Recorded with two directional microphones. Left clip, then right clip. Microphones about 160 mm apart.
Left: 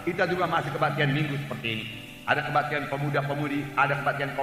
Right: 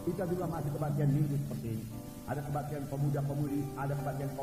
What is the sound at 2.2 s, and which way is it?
A man's voice, 35° right (ahead or behind).